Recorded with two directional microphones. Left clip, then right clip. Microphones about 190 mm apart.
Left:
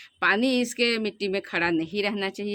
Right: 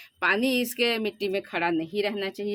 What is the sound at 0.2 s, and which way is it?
Speech, 30° left (ahead or behind).